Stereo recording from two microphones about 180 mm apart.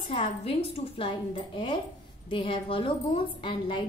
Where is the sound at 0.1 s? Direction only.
35° left (ahead or behind).